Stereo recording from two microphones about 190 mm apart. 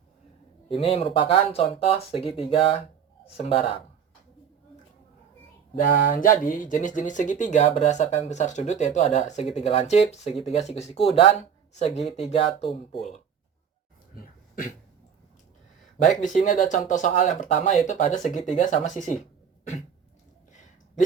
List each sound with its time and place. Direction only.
0.7 s speech: 30° left (ahead or behind)
5.8 s speech: 45° left (ahead or behind)
14.2 s dog: 45° left (ahead or behind)
16.0 s speech: 40° left (ahead or behind)